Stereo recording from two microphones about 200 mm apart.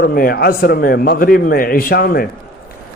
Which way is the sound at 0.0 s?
50° left (ahead or behind).